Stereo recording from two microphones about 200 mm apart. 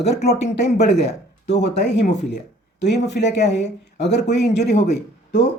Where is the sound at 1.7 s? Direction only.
60° left (ahead or behind).